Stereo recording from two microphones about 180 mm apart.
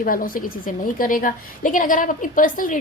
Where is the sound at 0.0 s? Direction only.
50° left (ahead or behind).